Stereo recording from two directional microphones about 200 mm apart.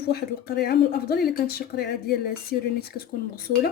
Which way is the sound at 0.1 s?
50° left (ahead or behind).